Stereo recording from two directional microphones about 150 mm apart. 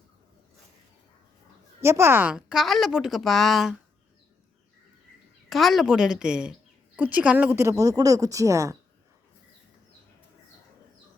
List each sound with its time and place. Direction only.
1.8 s a woman's voice: 15° right (ahead or behind); by 3.8 s centre (ahead or behind)
5.5 s a woman's voice: centre (ahead or behind); by 8.8 s 20° right (ahead or behind)